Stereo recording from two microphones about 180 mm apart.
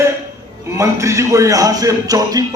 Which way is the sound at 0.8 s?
15° right (ahead or behind).